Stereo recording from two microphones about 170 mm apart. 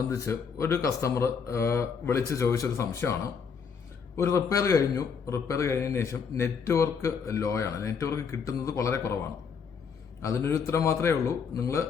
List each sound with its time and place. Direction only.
0.1 s a man's voice: 20° left (ahead or behind)
4.2 s a man's voice: 15° left (ahead or behind)
10.2 s a man's voice: 15° left (ahead or behind)